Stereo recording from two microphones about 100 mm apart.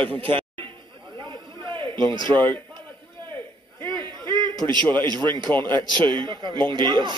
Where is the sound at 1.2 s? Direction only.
55° right (ahead or behind).